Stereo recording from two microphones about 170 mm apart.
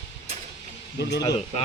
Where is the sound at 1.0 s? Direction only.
80° left.